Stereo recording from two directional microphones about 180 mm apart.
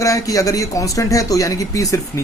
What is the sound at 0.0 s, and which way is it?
Speech, 20° left (ahead or behind).